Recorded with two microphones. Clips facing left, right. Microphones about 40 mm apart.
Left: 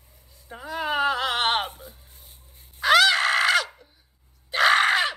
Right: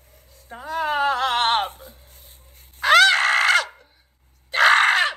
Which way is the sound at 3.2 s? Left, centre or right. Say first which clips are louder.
Right 3 dB; centre.